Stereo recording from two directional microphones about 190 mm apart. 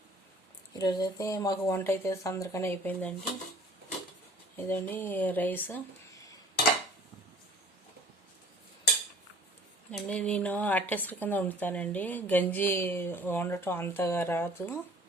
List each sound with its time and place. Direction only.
0.7 s speech: 20° left (ahead or behind)
4.5 s speech: 10° left (ahead or behind)
9.9 s speech: 5° left (ahead or behind)